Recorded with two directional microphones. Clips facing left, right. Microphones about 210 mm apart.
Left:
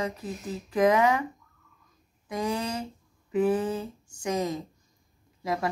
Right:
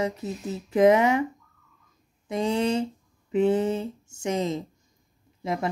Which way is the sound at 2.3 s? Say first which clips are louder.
Right 6 dB; 25° right (ahead or behind).